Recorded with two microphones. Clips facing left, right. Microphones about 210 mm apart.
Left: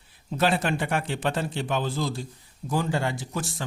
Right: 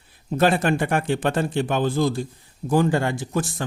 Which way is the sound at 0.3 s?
50° right (ahead or behind).